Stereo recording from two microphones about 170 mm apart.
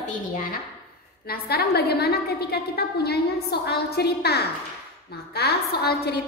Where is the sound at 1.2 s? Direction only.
65° left (ahead or behind).